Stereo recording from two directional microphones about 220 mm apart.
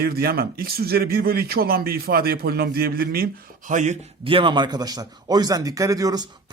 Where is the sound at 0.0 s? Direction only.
45° right (ahead or behind).